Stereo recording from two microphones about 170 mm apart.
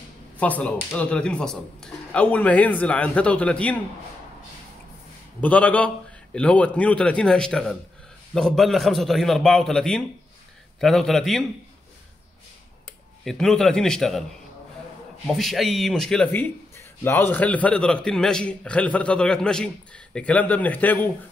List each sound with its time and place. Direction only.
0.4 s speech: 10° left (ahead or behind)
5.4 s speech: 10° left (ahead or behind)
13.2 s speech: centre (ahead or behind)
15.2 s speech: centre (ahead or behind)